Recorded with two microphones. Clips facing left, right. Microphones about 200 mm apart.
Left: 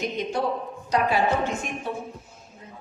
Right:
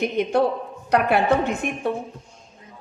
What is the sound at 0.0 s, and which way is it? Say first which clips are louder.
A woman's voice: right 6 dB; 60° right (ahead or behind).